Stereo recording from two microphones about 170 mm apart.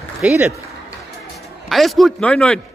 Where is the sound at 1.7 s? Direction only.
Centre (ahead or behind).